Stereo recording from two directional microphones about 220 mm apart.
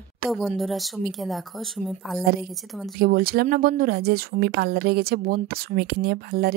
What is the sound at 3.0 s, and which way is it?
Speech, 40° right (ahead or behind).